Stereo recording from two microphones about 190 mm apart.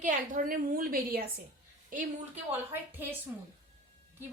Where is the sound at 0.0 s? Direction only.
45° right (ahead or behind).